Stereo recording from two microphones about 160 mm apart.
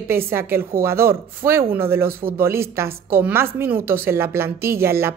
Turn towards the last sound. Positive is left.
turn(degrees=-15)  # may be behind; listen again after turning